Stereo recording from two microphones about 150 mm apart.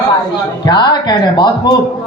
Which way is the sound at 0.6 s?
30° left (ahead or behind).